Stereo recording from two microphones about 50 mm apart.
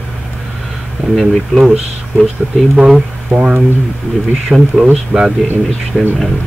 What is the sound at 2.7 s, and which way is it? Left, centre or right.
Speech, centre.